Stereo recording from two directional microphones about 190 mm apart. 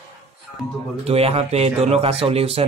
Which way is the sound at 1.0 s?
30° right (ahead or behind).